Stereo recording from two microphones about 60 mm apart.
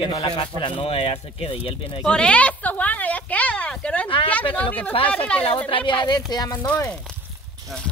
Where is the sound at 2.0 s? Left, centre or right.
Centre.